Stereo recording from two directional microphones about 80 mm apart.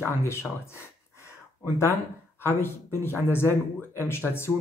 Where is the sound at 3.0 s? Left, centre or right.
Left.